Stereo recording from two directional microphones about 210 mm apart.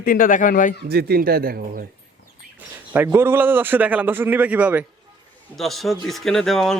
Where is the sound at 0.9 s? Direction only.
50° right (ahead or behind).